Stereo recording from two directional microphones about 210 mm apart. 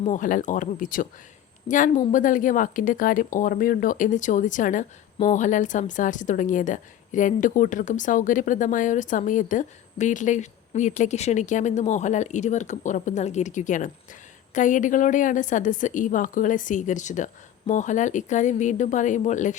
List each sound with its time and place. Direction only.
0.1 s a woman's voice: 40° left (ahead or behind)